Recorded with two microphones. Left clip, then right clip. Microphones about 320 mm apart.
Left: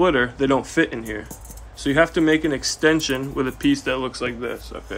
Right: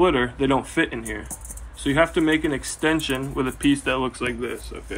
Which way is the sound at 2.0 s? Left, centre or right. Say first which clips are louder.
Left 2 dB; centre.